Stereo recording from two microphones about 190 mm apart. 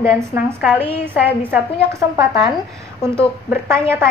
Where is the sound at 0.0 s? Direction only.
15° right (ahead or behind).